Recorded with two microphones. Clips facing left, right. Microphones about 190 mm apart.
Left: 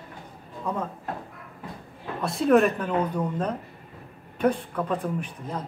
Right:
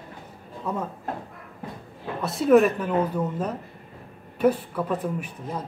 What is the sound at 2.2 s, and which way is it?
Speech, centre (ahead or behind).